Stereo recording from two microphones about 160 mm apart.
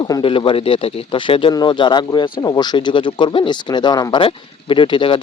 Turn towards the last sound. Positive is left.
turn(degrees=30)  # may be behind; listen again after turning